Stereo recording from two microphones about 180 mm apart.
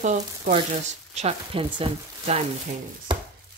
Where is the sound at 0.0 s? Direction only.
40° right (ahead or behind).